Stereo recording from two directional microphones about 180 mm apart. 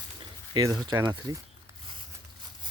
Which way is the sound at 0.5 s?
20° right (ahead or behind).